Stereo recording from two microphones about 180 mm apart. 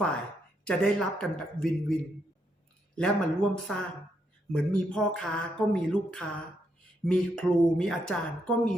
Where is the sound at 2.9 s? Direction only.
5° left (ahead or behind).